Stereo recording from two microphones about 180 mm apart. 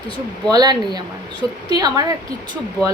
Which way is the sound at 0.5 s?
20° right (ahead or behind).